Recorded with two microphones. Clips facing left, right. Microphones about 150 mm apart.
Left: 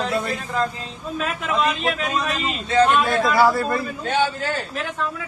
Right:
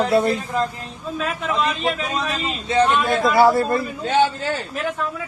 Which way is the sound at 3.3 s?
25° right (ahead or behind).